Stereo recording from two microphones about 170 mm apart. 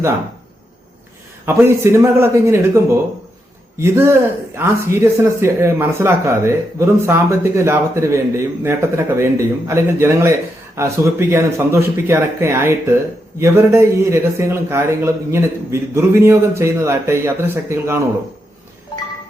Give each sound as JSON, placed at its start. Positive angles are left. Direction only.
{"t": 1.5, "sound": "speech", "side_deg": -15}